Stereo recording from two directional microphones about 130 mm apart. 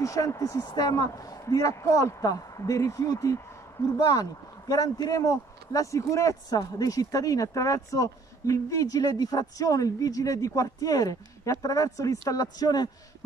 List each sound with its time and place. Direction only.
0.0 s speech: 25° left (ahead or behind)